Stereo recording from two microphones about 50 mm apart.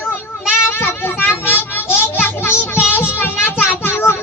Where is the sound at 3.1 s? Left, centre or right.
Left.